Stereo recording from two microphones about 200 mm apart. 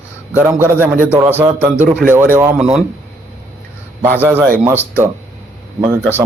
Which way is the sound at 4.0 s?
10° right (ahead or behind).